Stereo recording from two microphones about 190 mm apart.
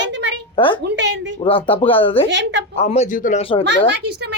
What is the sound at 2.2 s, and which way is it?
Speech, 70° right (ahead or behind).